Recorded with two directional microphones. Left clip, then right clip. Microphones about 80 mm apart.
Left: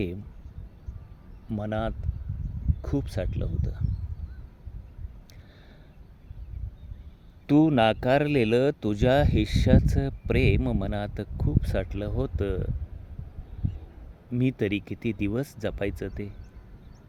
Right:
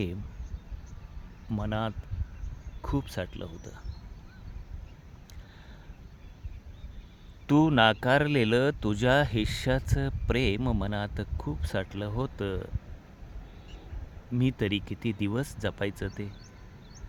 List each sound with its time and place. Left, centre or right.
1.5 s speech: centre
7.4 s speech: right
14.3 s speech: centre